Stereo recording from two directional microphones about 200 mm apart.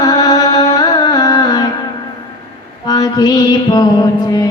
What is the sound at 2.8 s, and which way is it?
Mantra, 20° left (ahead or behind).